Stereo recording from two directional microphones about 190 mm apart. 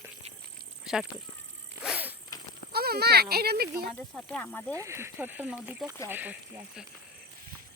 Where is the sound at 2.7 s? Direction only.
55° right (ahead or behind).